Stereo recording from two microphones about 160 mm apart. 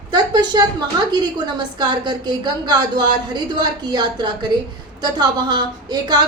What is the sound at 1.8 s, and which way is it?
A woman's voice, 25° right (ahead or behind).